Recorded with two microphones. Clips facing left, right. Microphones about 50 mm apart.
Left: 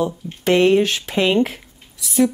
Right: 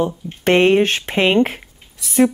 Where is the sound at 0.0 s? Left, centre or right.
Right.